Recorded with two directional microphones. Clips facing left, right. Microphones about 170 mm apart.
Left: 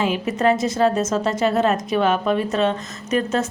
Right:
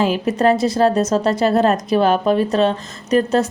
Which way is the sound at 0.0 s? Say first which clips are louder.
Right 3 dB; 35° right (ahead or behind).